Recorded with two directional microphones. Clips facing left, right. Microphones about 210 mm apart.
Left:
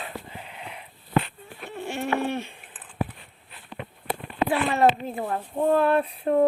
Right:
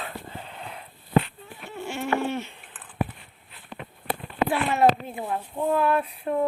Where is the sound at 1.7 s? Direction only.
35° left (ahead or behind).